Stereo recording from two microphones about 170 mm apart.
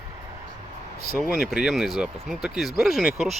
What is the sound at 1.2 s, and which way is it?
Speech, centre (ahead or behind).